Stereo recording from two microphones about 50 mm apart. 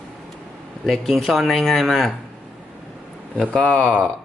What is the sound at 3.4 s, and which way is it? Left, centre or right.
Speech, centre.